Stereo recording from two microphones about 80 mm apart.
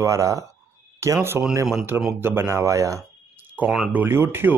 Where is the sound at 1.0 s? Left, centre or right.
Right.